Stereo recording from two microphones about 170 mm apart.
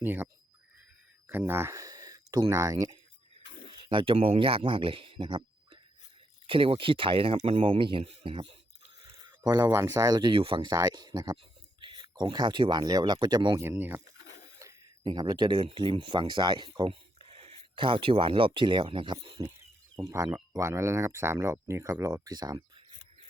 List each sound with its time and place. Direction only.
0.0 s speech: 10° right (ahead or behind)
1.3 s speech: 10° right (ahead or behind); by 8.5 s 30° right (ahead or behind)
9.0 s a sound: 20° right (ahead or behind)
9.6 s speech: 15° right (ahead or behind)
13.6 s speech: 10° right (ahead or behind)